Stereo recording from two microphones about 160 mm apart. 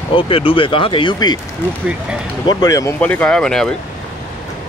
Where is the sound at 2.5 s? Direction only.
25° left (ahead or behind).